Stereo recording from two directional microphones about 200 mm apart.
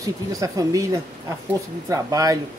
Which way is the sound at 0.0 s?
15° right (ahead or behind).